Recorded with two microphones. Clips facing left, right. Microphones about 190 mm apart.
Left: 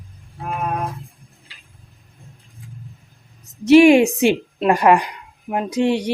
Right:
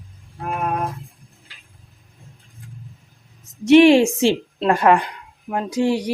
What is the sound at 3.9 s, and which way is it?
A woman's voice, 15° left (ahead or behind).